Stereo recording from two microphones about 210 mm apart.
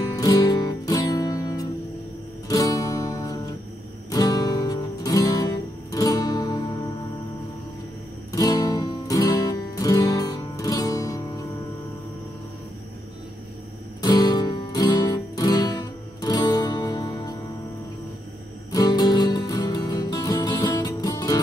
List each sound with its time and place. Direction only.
0.0 s music: 15° left (ahead or behind)
8.3 s music: 15° left (ahead or behind)
14.0 s music: 20° left (ahead or behind)
18.7 s music: 20° left (ahead or behind)